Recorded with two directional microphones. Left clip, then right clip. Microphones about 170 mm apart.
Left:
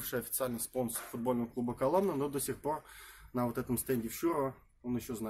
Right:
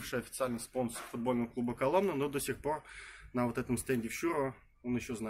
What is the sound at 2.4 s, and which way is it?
Speech, 30° left (ahead or behind).